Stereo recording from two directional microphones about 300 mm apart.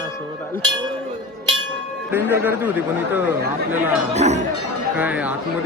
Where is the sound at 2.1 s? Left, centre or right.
Centre.